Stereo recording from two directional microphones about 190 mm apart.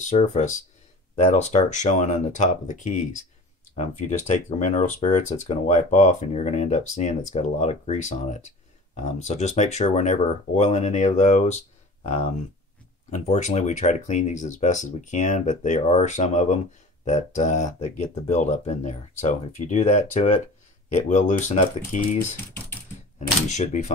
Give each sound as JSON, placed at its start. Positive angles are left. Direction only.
{"t": 0.0, "sound": "speech", "side_deg": 35}
{"t": 23.5, "sound": "speech", "side_deg": 40}